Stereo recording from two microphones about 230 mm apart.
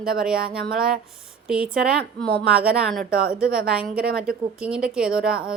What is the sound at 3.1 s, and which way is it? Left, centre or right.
A woman's voice, right.